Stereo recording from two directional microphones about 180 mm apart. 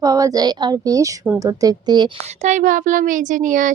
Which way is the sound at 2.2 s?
40° right (ahead or behind).